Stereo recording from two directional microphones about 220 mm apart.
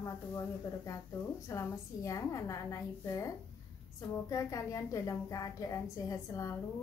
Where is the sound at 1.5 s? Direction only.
15° left (ahead or behind).